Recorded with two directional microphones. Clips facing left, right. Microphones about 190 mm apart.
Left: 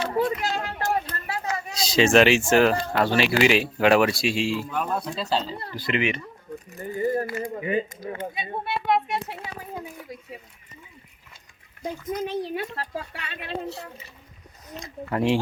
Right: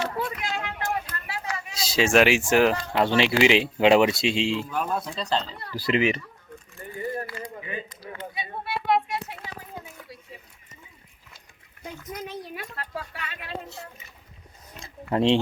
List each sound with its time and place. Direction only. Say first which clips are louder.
0.1 s a sound: left 6 dB; 30° left (ahead or behind)
1.7 s speech: left 2 dB; 5° right (ahead or behind); by 4.6 s 20° right (ahead or behind)
4.7 s speech: left 1 dB; centre (ahead or behind)
5.7 s speech: right 3 dB; 35° right (ahead or behind)
6.7 s a child's voice: left 7 dB; 25° left (ahead or behind)
11.8 s speech: left 7 dB; 30° left (ahead or behind)
14.8 s speech: right 2 dB; 30° right (ahead or behind)